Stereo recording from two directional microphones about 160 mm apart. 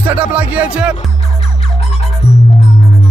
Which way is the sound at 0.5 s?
10° right (ahead or behind).